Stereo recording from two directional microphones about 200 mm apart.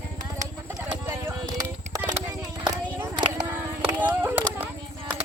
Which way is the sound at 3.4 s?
10° right (ahead or behind).